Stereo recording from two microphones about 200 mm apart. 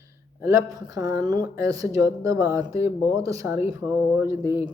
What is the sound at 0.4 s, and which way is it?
Speech, 15° right (ahead or behind).